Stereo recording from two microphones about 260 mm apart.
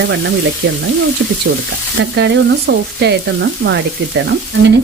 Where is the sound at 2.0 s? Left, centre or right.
Right.